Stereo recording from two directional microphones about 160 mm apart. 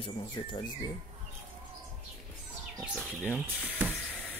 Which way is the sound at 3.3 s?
10° right (ahead or behind).